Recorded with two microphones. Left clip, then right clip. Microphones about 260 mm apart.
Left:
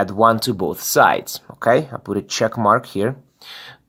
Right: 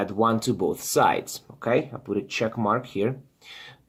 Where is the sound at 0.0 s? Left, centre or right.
Left.